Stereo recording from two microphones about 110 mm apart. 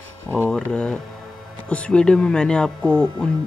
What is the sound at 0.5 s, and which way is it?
Speech, 10° left (ahead or behind).